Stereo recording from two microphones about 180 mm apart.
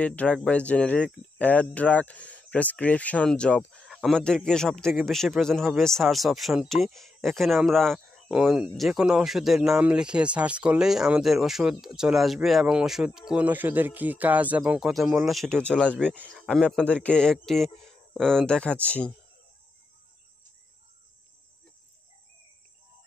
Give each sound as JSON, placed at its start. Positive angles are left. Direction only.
{"t": 0.0, "sound": "speech", "side_deg": 5}